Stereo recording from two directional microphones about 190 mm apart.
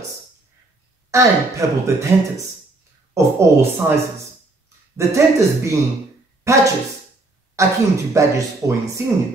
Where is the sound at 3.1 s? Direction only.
15° right (ahead or behind).